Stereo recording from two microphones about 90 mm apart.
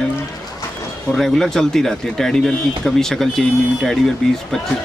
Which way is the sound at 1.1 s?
5° left (ahead or behind).